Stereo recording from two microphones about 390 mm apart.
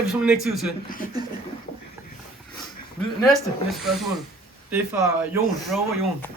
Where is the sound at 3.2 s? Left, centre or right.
Centre.